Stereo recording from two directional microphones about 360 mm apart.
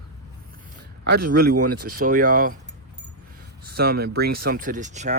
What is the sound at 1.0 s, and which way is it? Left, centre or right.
Speech, right.